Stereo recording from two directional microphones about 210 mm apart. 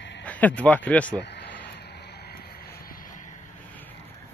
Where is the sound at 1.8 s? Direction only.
50° left (ahead or behind).